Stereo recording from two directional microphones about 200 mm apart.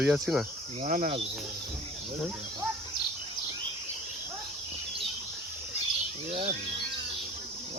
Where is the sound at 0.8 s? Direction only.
40° right (ahead or behind).